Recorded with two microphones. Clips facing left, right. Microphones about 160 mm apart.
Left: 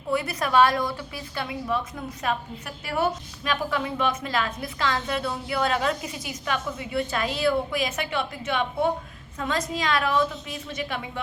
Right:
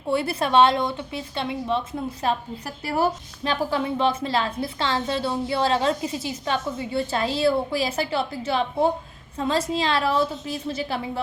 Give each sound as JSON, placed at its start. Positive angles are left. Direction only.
{"t": 0.1, "sound": "a woman's voice", "side_deg": -30}